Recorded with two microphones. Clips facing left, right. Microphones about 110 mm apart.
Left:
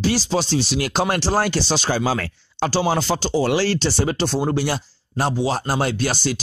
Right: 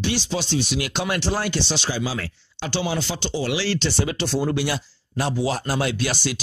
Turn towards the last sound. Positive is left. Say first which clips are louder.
# left 3 dB
turn(degrees=35)  # may be behind; listen again after turning